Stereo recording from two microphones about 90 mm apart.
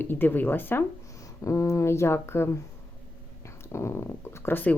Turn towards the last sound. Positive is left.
turn(degrees=20)  # may be behind; listen again after turning